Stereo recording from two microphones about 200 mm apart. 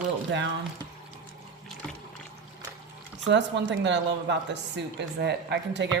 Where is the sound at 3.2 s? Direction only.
60° right (ahead or behind).